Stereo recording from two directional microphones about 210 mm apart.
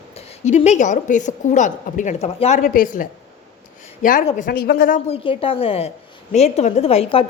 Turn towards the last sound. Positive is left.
turn(degrees=30)  # may be behind; listen again after turning